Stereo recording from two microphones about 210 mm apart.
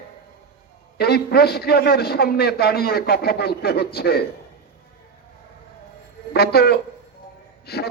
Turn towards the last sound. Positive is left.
turn(degrees=50)  # may be behind; listen again after turning